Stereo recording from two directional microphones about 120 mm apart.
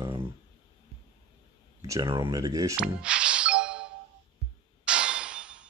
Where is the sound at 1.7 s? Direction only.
25° right (ahead or behind).